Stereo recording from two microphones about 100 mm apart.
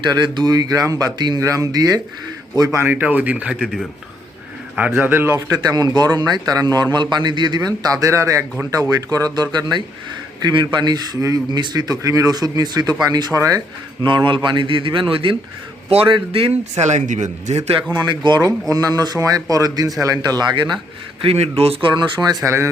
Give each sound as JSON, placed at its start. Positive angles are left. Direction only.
{"t": 0.0, "sound": "speech", "side_deg": -45}
{"t": 2.7, "sound": "speech", "side_deg": -20}
{"t": 4.9, "sound": "a man's voice", "side_deg": -20}
{"t": 5.5, "sound": "a man's voice", "side_deg": -40}
{"t": 14.3, "sound": "speech", "side_deg": -50}
{"t": 17.9, "sound": "a man's voice", "side_deg": -45}
{"t": 18.7, "sound": "speech", "side_deg": -40}
{"t": 21.2, "sound": "speech", "side_deg": -75}
{"t": 22.4, "sound": "a man's voice", "side_deg": -25}